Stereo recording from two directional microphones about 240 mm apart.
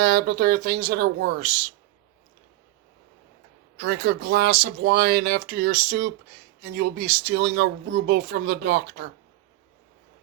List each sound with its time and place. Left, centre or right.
0.0 s speech: right
3.8 s speech: right